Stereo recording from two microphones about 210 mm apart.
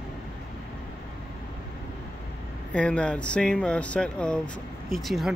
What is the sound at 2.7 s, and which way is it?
Speech, 5° left (ahead or behind).